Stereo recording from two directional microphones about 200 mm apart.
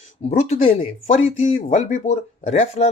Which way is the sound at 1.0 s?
35° left (ahead or behind).